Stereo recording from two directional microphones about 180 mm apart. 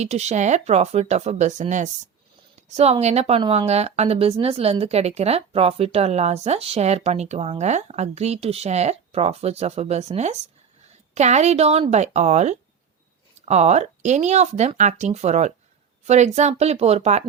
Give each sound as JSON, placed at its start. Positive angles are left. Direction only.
{"t": 0.0, "sound": "speech", "side_deg": -40}